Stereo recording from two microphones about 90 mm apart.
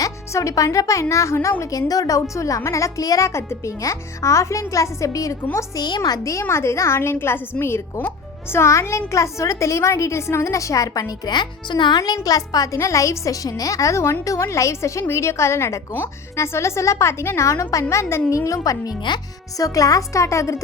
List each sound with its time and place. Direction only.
0.0 s a woman's voice: 40° left (ahead or behind)
5.5 s speech: 45° left (ahead or behind)
6.0 s a woman's voice: 35° left (ahead or behind)
11.3 s speech: 60° left (ahead or behind)
11.9 s a woman's voice: 45° left (ahead or behind)